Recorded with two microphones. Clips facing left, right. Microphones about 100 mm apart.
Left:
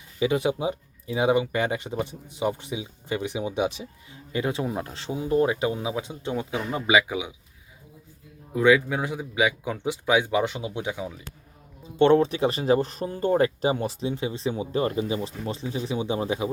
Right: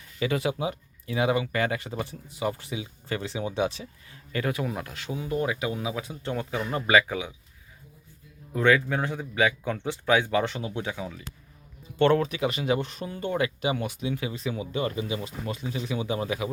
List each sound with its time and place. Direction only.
0.2 s speech: 20° left (ahead or behind)
6.3 s speech: 15° left (ahead or behind)
8.5 s speech: 10° left (ahead or behind); by 16.5 s 25° left (ahead or behind)